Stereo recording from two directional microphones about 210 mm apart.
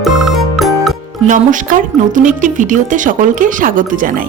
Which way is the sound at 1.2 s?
40° right (ahead or behind).